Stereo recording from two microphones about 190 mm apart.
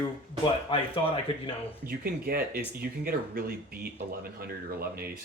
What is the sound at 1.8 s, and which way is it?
Speech, 50° right (ahead or behind).